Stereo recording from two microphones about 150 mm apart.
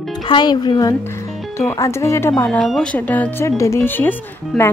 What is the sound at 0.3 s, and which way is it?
Speech, 30° left (ahead or behind).